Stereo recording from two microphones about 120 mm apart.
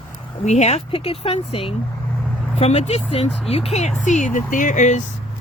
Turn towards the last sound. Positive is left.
turn(degrees=90)